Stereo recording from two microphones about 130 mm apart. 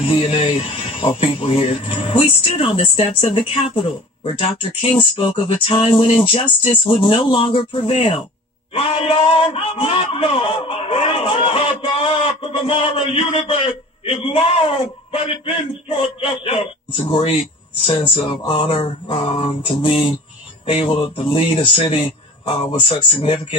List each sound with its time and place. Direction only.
0.0 s a man's voice: 45° left (ahead or behind)
5.1 s a sound: 40° left (ahead or behind)
6.6 s a man's voice: 45° left (ahead or behind)